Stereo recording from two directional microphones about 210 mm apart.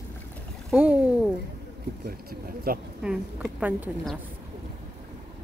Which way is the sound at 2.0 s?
45° right (ahead or behind).